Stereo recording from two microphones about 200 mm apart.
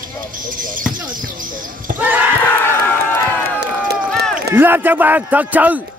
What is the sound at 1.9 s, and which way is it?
Speech, 10° right (ahead or behind).